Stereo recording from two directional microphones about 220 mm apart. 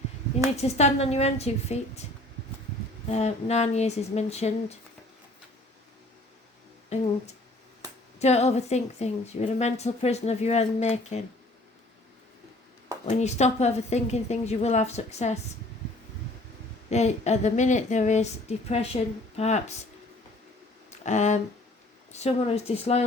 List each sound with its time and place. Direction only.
0.5 s a woman's voice: 30° left (ahead or behind)
3.1 s a woman's voice: 30° left (ahead or behind)
8.2 s a woman's voice: 30° left (ahead or behind)
13.1 s a woman's voice: 30° left (ahead or behind)
16.9 s a woman's voice: 30° left (ahead or behind)
21.0 s a woman's voice: 35° left (ahead or behind)